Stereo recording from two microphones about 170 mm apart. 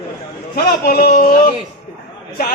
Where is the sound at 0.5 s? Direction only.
65° left (ahead or behind).